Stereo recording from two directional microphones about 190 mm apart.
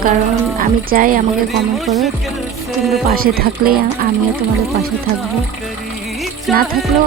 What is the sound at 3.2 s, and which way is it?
Speech, 50° right (ahead or behind).